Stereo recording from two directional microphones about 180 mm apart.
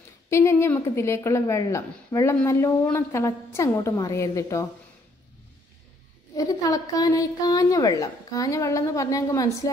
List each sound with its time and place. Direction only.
0.3 s a woman's voice: 15° left (ahead or behind)
6.3 s a woman's voice: 20° left (ahead or behind)